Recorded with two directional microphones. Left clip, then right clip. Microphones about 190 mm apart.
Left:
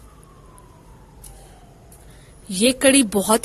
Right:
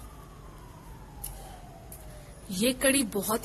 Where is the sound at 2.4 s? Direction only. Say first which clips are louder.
Left 10 dB; 35° left (ahead or behind).